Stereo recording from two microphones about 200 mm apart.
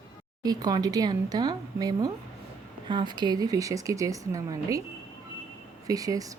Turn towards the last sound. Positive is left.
turn(degrees=-15)  # may be behind; listen again after turning